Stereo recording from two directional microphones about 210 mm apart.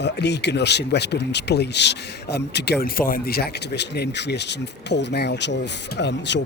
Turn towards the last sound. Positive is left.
turn(degrees=55)  # may be behind; listen again after turning